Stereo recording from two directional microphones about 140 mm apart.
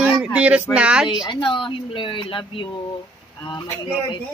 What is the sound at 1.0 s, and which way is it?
A woman's voice, 30° left (ahead or behind).